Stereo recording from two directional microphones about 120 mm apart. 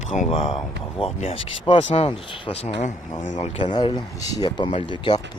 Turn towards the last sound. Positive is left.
turn(degrees=40)  # may be behind; listen again after turning